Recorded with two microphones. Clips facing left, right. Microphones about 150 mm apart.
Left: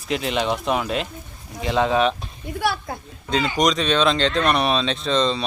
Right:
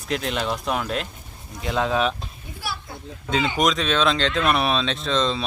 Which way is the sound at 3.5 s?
Centre (ahead or behind).